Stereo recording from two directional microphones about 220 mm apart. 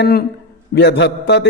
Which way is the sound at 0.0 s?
45° left (ahead or behind).